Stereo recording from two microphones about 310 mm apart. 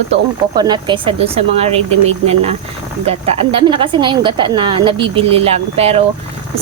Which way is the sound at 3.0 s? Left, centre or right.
Centre.